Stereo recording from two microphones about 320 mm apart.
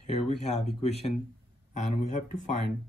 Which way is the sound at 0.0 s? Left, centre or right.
Left.